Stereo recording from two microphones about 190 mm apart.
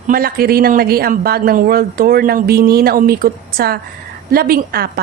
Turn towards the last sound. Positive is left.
turn(degrees=-55)  # may be behind; listen again after turning